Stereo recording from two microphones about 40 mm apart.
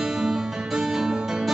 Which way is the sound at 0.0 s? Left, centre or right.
Centre.